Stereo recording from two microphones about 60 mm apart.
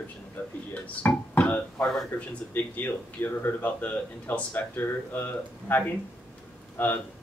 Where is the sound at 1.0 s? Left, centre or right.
Left.